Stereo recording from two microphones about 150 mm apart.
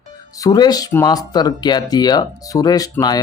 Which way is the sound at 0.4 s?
25° left (ahead or behind).